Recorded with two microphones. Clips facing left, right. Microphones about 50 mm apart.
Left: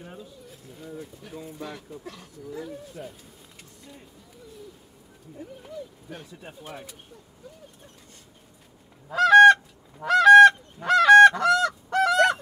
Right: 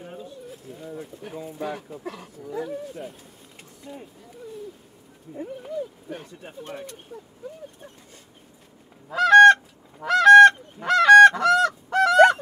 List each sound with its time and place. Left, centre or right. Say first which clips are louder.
0.0 s pigeon: right 4 dB; centre
1.4 s speech: right 7 dB; centre
2.8 s speech: right 4 dB; centre
3.8 s speech: right 9 dB; centre
6.6 s speech: right 6 dB; centre
9.1 s goose: right 1 dB; centre